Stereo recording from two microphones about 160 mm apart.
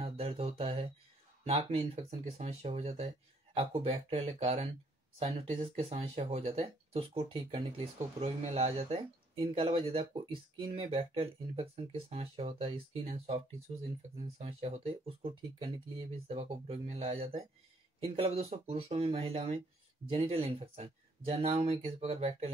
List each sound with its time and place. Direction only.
0.0 s a sound: 40° right (ahead or behind)
1.7 s speech: 40° right (ahead or behind)
14.1 s speech: 40° right (ahead or behind)